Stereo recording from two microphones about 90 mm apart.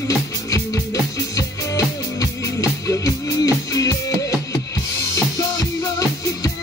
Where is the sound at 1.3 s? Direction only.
40° left (ahead or behind).